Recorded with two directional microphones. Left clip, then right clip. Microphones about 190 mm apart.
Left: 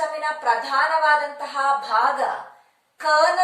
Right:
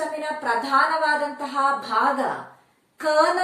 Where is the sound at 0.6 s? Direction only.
15° left (ahead or behind).